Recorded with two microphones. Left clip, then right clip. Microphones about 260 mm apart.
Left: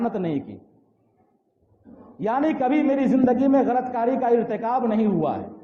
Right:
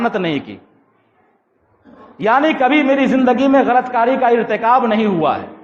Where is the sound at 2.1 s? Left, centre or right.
Right.